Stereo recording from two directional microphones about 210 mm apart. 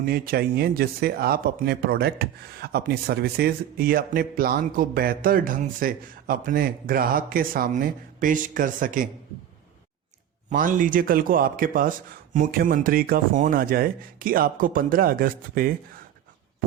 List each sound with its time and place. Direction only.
0.0 s speech: 45° right (ahead or behind)
10.5 s speech: 40° right (ahead or behind)